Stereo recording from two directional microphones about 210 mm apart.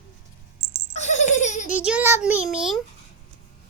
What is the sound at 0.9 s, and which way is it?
Laughter, 35° left (ahead or behind).